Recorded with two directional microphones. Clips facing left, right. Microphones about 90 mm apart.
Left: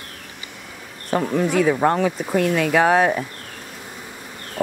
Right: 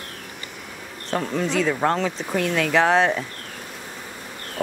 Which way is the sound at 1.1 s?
10° left (ahead or behind).